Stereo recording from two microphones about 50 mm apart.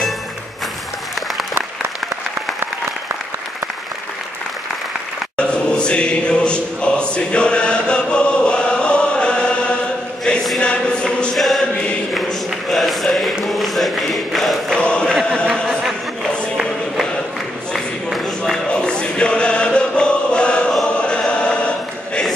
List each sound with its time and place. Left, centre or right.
5.4 s chant: centre
10.6 s a sound: centre
11.3 s choir: centre
12.4 s chant: centre
14.7 s chant: centre
18.7 s choir: centre